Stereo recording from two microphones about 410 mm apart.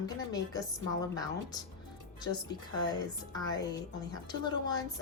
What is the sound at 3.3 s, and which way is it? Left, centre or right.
A woman's voice, centre.